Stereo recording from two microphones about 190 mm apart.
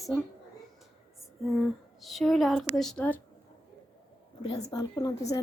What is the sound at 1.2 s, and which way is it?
Speech, centre (ahead or behind).